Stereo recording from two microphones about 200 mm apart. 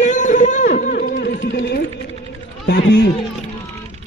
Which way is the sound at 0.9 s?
55° left (ahead or behind).